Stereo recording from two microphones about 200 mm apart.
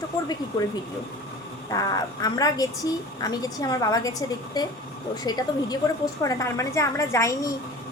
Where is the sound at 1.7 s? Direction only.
15° left (ahead or behind).